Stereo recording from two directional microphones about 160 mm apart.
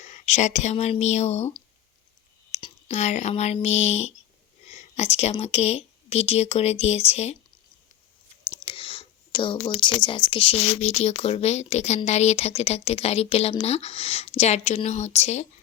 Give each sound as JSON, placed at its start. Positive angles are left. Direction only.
{"t": 0.0, "sound": "speech", "side_deg": 45}
{"t": 2.5, "sound": "whispering", "side_deg": 35}
{"t": 2.9, "sound": "speech", "side_deg": 45}
{"t": 4.7, "sound": "a sound", "side_deg": 45}
{"t": 5.4, "sound": "speech", "side_deg": 40}
{"t": 8.4, "sound": "speech", "side_deg": 35}